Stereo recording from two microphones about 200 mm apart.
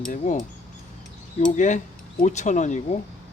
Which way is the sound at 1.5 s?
35° left (ahead or behind).